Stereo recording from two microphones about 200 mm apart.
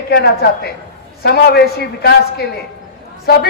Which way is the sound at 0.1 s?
55° left (ahead or behind).